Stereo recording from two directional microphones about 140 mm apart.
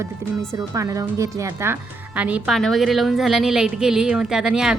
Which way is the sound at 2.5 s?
Centre (ahead or behind).